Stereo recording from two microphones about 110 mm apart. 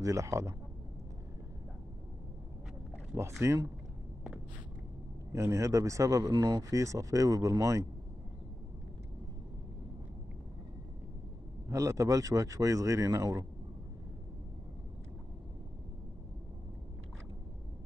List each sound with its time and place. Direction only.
0.0 s a man's voice: 30° right (ahead or behind)
3.2 s a man's voice: 25° right (ahead or behind)
5.3 s a man's voice: 25° right (ahead or behind)
11.7 s speech: 30° right (ahead or behind)